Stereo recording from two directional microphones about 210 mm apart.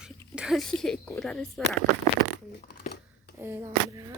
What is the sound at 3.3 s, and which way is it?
Speech, 10° right (ahead or behind).